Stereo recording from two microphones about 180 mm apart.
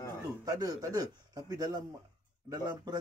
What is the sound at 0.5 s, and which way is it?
A man's voice, 20° right (ahead or behind).